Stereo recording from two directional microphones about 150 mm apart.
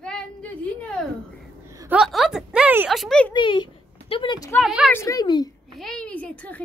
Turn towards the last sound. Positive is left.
turn(degrees=10)  # may be behind; listen again after turning